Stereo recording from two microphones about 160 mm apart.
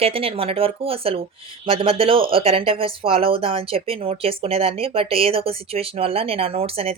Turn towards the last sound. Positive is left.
turn(degrees=-35)  # may be behind; listen again after turning